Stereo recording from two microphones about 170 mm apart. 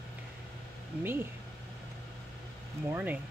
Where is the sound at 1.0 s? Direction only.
15° right (ahead or behind).